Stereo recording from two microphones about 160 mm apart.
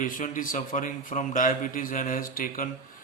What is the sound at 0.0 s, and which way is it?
A man's voice, 55° left (ahead or behind).